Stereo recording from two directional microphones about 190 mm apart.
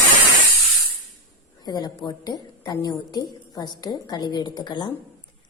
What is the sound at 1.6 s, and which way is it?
A woman's voice, 20° left (ahead or behind).